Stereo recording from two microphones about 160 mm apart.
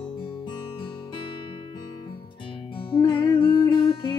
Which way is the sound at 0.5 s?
30° left (ahead or behind).